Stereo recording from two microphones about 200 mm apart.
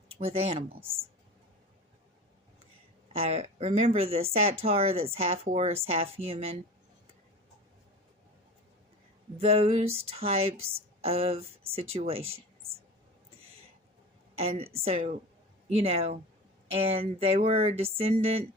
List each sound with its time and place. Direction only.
0.2 s speech: 30° right (ahead or behind)
3.1 s speech: 30° right (ahead or behind)
9.4 s speech: 30° right (ahead or behind)
14.3 s speech: 30° right (ahead or behind)